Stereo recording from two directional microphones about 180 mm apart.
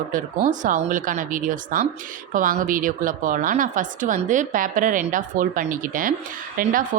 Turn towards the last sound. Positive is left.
turn(degrees=-50)  # may be behind; listen again after turning